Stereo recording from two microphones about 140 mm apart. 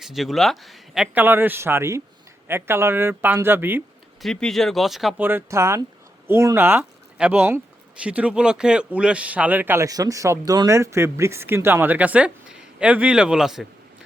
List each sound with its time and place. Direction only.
0.0 s a man's voice: centre (ahead or behind)
4.2 s a man's voice: 5° left (ahead or behind)
5.2 s speech: 20° right (ahead or behind)